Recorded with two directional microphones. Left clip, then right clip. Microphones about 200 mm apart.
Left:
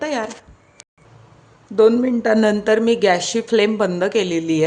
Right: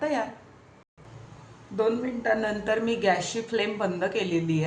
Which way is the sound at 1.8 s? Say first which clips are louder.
Left 12 dB; 60° left (ahead or behind).